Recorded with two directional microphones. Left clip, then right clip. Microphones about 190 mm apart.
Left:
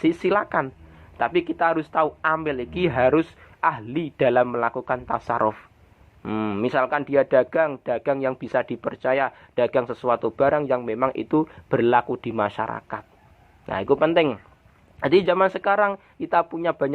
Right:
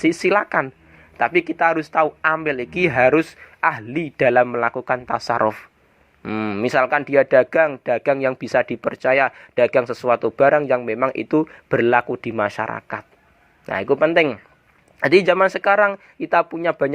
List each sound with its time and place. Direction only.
0.0 s speech: 20° right (ahead or behind)
6.2 s speech: 15° right (ahead or behind)
8.1 s speech: 35° right (ahead or behind)
8.4 s speech: 20° right (ahead or behind)
13.7 s speech: 20° right (ahead or behind)